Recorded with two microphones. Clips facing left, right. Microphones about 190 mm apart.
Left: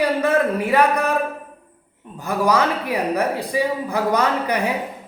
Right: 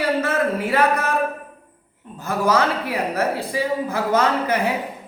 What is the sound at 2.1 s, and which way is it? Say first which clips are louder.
A woman's voice: left 1 dB; 15° left (ahead or behind).